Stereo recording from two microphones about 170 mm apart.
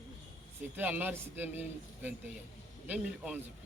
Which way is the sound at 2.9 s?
5° right (ahead or behind).